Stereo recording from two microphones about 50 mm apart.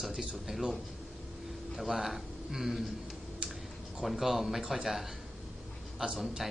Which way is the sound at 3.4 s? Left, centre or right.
Right.